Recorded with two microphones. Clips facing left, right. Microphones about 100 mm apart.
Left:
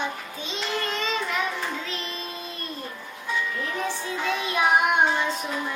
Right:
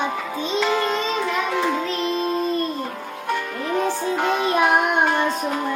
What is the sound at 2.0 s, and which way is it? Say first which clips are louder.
Music: right 13 dB; 50° right (ahead or behind).